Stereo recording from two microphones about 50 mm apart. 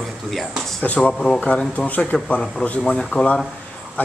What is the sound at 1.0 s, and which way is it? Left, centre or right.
Speech, centre.